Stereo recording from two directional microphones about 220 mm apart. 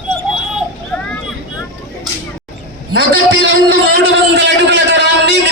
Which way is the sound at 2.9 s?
55° right (ahead or behind).